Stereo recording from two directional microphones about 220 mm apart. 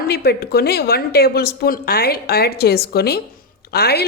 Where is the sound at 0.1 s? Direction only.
45° left (ahead or behind).